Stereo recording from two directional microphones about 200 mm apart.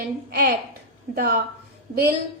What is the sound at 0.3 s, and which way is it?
A woman's voice, 50° right (ahead or behind).